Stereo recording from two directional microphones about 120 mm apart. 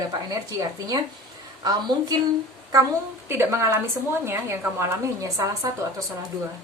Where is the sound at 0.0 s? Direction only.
30° right (ahead or behind).